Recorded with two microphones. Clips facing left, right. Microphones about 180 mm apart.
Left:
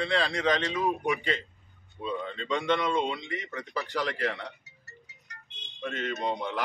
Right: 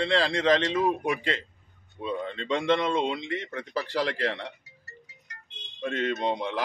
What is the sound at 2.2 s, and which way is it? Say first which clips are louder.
A man's voice: right 3 dB; 30° right (ahead or behind).